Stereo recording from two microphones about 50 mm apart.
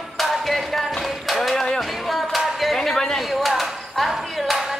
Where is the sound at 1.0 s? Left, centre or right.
Centre.